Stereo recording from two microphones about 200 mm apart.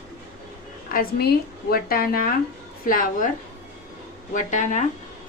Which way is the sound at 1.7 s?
50° left (ahead or behind).